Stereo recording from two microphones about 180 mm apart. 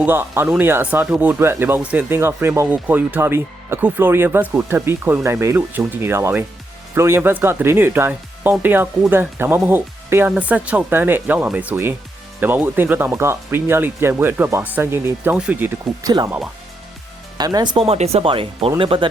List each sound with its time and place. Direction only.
0.0 s speech: 10° right (ahead or behind)
17.3 s speech: 25° right (ahead or behind)